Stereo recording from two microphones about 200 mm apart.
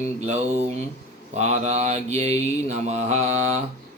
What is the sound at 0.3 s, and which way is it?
Mantra, 35° right (ahead or behind).